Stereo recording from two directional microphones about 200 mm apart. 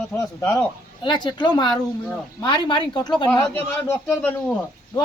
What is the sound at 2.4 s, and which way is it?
Speech, 25° left (ahead or behind).